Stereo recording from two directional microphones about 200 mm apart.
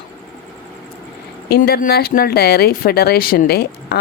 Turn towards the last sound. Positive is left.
turn(degrees=50)  # may be behind; listen again after turning